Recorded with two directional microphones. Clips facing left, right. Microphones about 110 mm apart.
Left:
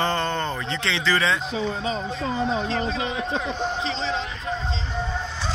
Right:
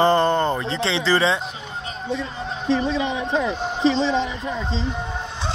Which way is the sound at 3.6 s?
5° right (ahead or behind).